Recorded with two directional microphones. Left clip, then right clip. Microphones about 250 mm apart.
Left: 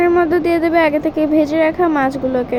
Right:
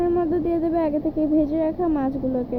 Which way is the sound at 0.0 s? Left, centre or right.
Left.